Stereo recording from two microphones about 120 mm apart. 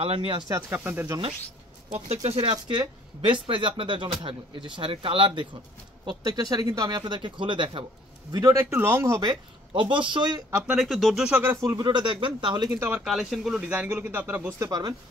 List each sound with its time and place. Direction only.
0.0 s speech: 50° right (ahead or behind)
0.5 s speech: 20° right (ahead or behind)
1.9 s speech: 60° right (ahead or behind)
2.5 s speech: 40° right (ahead or behind)
6.0 s speech: 30° right (ahead or behind)
7.2 s speech: 45° right (ahead or behind)
8.3 s speech: 30° right (ahead or behind)
9.3 s speech: 45° right (ahead or behind)
10.7 s speech: centre (ahead or behind)
11.5 s speech: 30° right (ahead or behind)
12.7 s speech: 15° right (ahead or behind)
13.0 s speech: centre (ahead or behind)
14.6 s speech: 35° right (ahead or behind)